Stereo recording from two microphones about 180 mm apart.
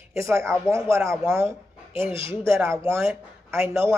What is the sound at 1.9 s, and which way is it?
Speech, 5° right (ahead or behind).